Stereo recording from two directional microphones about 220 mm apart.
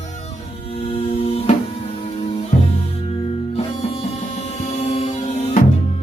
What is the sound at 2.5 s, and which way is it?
Music, 40° left (ahead or behind).